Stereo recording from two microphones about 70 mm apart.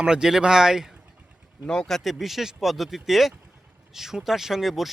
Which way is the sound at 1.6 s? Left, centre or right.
Centre.